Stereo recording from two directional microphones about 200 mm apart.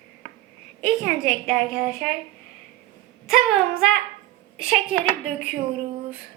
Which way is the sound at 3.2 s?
Centre (ahead or behind).